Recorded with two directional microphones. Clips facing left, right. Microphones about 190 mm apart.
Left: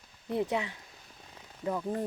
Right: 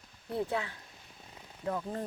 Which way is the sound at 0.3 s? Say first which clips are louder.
Left 3 dB; 15° left (ahead or behind).